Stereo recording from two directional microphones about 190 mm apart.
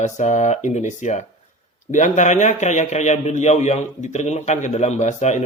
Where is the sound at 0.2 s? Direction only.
40° left (ahead or behind).